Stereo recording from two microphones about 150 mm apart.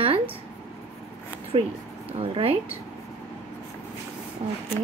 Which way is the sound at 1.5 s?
40° right (ahead or behind).